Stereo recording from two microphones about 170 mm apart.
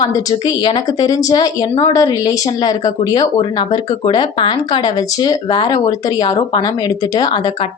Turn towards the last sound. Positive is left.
turn(degrees=25)  # may be behind; listen again after turning